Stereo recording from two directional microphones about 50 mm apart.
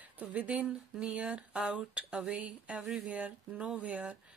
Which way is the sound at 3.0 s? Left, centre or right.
Right.